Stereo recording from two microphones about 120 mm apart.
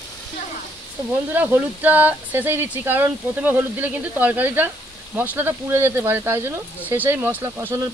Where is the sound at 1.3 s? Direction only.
15° right (ahead or behind).